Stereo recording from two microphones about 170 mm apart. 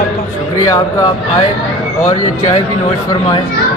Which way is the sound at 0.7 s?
20° left (ahead or behind).